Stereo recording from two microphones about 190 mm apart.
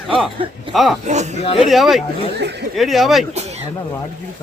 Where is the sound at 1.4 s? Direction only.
30° left (ahead or behind).